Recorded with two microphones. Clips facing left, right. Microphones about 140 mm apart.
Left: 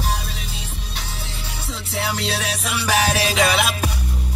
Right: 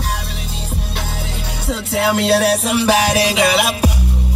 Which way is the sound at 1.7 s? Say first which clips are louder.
Right 9 dB; 65° right (ahead or behind).